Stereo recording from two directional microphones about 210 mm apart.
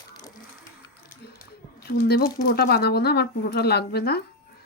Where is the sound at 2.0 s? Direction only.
45° left (ahead or behind).